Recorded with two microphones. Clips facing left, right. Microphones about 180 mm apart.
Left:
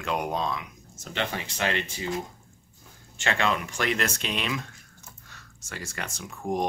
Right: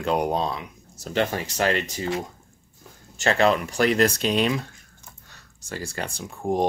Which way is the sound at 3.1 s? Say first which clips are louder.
Right 7 dB; 40° right (ahead or behind).